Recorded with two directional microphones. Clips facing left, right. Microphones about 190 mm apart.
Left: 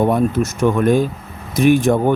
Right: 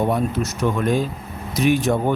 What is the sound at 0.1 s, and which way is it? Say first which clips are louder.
Speech: left 5 dB; 50° left (ahead or behind).